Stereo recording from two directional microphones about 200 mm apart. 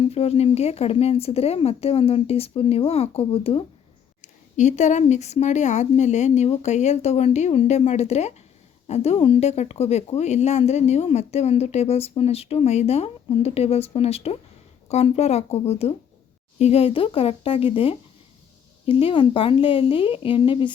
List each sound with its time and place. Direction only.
0.0 s speech: 30° left (ahead or behind)